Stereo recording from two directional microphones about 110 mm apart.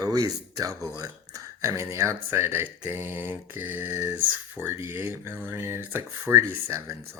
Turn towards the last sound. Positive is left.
turn(degrees=-25)  # may be behind; listen again after turning